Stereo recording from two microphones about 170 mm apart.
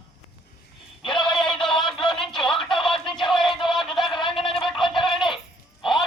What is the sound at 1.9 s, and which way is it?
Music, 30° left (ahead or behind).